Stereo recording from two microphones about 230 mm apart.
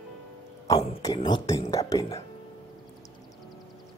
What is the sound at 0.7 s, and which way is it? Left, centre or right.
Speech, centre.